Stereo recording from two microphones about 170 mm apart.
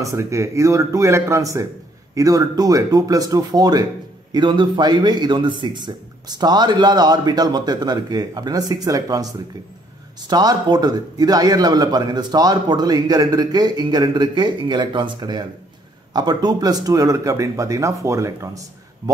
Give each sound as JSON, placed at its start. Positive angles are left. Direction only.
{"t": 0.0, "sound": "a man's voice", "side_deg": -15}
{"t": 10.3, "sound": "a man's voice", "side_deg": -25}